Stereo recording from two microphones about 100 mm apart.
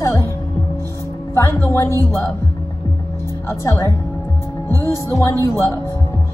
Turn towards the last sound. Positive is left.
turn(degrees=25)  # may be behind; listen again after turning